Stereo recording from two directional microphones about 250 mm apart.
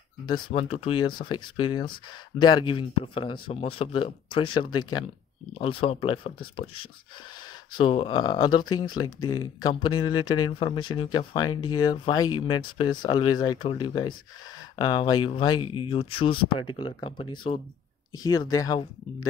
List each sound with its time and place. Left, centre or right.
0.3 s speech: left